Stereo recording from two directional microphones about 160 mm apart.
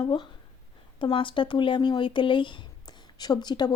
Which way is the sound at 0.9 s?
30° left (ahead or behind).